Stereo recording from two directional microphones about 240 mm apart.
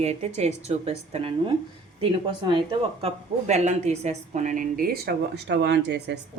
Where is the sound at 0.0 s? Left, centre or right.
Right.